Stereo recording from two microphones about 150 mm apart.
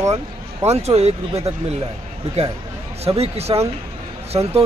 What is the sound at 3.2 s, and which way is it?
Speech, 40° right (ahead or behind).